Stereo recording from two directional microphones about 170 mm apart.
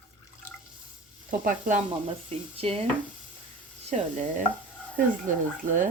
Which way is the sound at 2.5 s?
35° right (ahead or behind).